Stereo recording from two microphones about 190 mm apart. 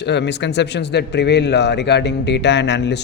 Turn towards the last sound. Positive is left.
turn(degrees=65)  # may be behind; listen again after turning